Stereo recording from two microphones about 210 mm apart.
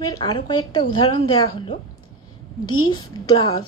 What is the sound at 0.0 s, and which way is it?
Speech, 20° left (ahead or behind).